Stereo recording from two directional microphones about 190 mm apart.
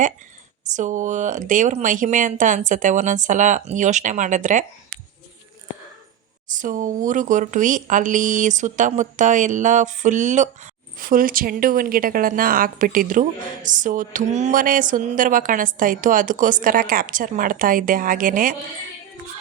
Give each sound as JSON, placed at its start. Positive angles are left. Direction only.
{"t": 0.7, "sound": "speech", "side_deg": -40}
{"t": 6.5, "sound": "speech", "side_deg": -45}